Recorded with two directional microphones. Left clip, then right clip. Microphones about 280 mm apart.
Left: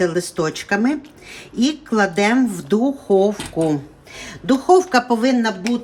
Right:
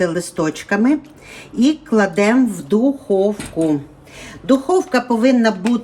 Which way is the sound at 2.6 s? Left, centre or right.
Left.